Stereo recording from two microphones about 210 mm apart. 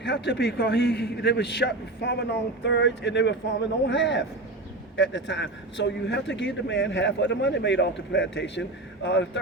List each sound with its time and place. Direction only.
0.0 s a man's voice: 55° left (ahead or behind)